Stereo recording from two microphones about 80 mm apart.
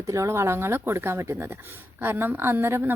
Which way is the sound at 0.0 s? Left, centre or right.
Right.